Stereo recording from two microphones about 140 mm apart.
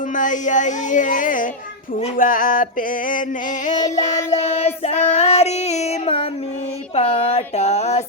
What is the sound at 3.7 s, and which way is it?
Music, 25° left (ahead or behind).